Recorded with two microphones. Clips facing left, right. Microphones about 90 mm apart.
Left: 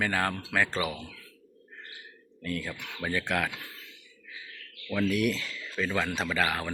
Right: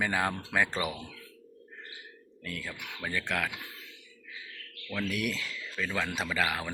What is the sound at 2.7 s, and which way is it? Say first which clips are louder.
Speech: left 1 dB; 10° right (ahead or behind).